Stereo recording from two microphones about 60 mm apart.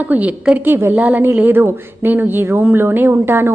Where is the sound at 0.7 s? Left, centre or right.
Right.